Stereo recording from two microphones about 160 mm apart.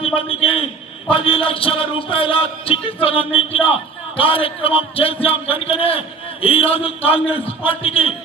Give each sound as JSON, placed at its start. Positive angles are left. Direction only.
{"t": 0.0, "sound": "a man's voice", "side_deg": 35}